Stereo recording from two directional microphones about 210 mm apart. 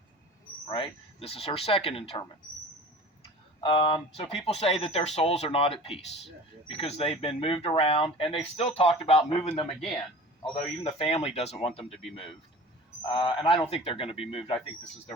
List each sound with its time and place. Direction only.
0.7 s speech: 25° left (ahead or behind)
3.6 s speech: 25° left (ahead or behind)
10.8 s speech: 30° left (ahead or behind)
13.1 s speech: 20° left (ahead or behind)